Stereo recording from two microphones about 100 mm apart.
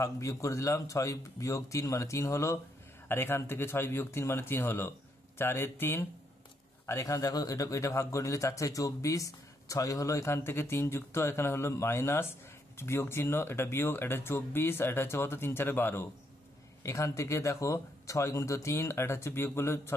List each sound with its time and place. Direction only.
0.0 s speech: 30° left (ahead or behind)